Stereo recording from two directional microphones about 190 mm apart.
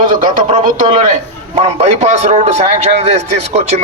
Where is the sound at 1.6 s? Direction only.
35° right (ahead or behind).